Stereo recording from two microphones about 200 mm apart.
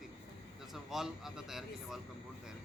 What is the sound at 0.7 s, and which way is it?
A man's voice, centre (ahead or behind).